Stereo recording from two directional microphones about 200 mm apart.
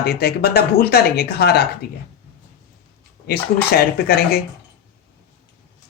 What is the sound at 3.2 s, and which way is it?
Speech, 50° left (ahead or behind).